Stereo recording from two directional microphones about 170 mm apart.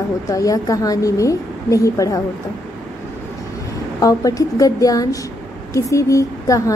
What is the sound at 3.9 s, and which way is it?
A woman's voice, 20° left (ahead or behind).